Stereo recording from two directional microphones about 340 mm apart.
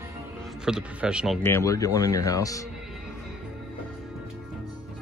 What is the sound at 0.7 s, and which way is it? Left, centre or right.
Speech, centre.